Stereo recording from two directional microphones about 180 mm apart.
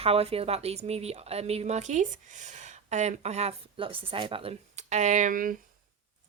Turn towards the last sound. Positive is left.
turn(degrees=-50)  # may be behind; listen again after turning